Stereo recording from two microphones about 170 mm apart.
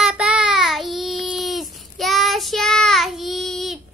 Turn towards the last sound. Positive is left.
turn(degrees=0)  # may be behind; listen again after turning